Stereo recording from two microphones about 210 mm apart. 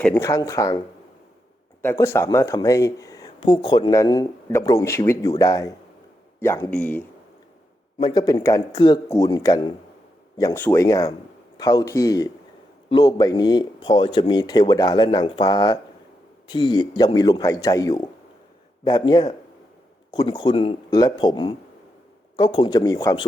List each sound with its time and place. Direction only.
0.0 s speech: 15° left (ahead or behind)
1.8 s speech: 10° left (ahead or behind)
7.9 s speech: 20° left (ahead or behind)